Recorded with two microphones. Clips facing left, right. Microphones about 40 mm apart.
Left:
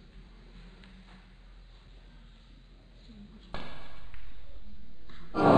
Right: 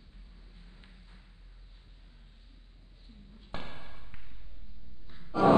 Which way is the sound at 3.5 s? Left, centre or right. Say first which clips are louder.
Right 1 dB; centre.